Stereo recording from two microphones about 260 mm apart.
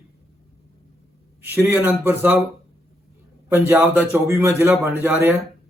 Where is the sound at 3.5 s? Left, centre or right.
Centre.